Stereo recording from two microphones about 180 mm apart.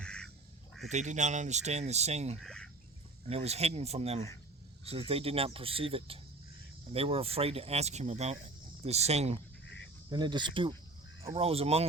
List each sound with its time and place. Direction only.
0.0 s bird: 5° left (ahead or behind)
0.9 s speech: 40° right (ahead or behind)
2.4 s fowl: 5° left (ahead or behind)
3.2 s speech: 35° right (ahead or behind)
10.1 s cricket: 25° right (ahead or behind)
11.3 s speech: 30° right (ahead or behind)